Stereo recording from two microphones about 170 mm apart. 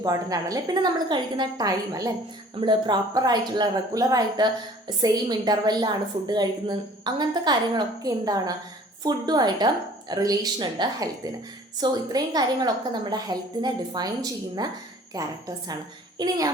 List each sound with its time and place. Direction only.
0.0 s a woman's voice: 20° right (ahead or behind)